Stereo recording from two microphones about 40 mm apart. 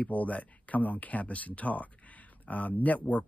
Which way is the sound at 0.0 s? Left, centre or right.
Left.